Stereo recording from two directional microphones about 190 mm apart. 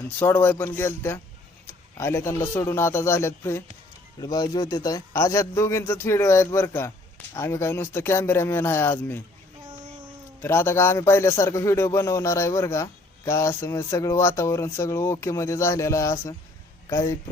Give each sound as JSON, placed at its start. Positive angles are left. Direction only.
{"t": 0.2, "sound": "a man's voice", "side_deg": 10}
{"t": 10.4, "sound": "a man's voice", "side_deg": 10}